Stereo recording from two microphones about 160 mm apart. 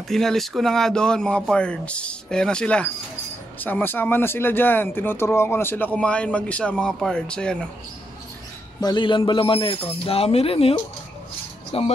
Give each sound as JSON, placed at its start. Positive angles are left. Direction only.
{"t": 0.1, "sound": "speech", "side_deg": 0}
{"t": 8.8, "sound": "speech", "side_deg": 30}